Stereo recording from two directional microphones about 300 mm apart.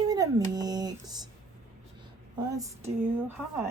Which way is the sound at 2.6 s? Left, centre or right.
Centre.